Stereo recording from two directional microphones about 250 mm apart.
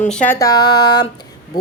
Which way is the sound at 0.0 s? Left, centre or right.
Centre.